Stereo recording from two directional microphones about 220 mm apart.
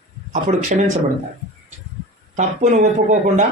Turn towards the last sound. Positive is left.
turn(degrees=-35)  # may be behind; listen again after turning